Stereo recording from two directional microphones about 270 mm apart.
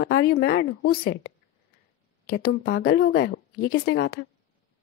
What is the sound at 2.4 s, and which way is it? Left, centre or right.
A woman's voice, left.